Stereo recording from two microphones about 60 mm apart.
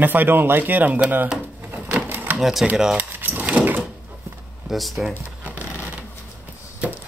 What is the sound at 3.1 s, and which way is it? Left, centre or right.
Vehicle, right.